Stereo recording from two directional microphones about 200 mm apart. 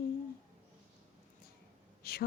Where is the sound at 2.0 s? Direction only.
50° left (ahead or behind).